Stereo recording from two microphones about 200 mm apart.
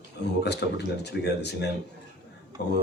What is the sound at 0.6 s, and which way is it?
Speech, 50° left (ahead or behind).